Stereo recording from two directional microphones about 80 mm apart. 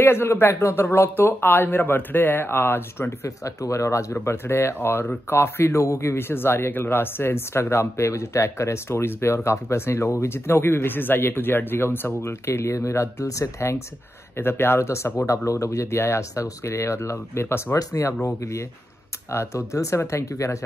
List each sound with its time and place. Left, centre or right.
0.0 s speech: left